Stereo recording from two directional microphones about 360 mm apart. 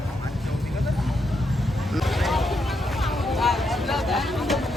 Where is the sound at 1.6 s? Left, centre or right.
Centre.